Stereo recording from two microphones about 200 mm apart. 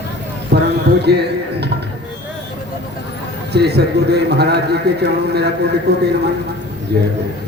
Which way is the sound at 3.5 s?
55° right (ahead or behind).